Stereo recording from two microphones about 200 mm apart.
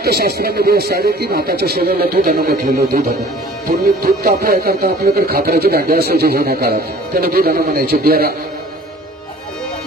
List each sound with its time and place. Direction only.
0.0 s speech: 50° right (ahead or behind)